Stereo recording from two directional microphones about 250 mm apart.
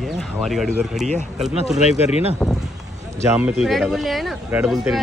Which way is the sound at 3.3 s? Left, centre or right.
Centre.